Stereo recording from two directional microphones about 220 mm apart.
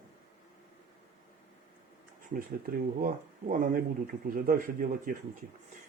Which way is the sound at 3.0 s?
40° right (ahead or behind).